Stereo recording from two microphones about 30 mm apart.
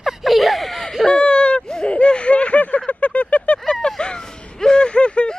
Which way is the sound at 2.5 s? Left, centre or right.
Left.